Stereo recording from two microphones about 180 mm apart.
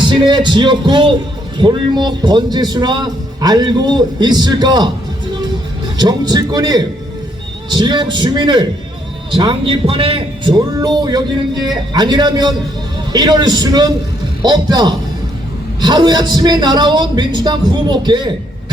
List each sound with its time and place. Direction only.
0.0 s a man's voice: 25° right (ahead or behind)
6.0 s a man's voice: 25° right (ahead or behind)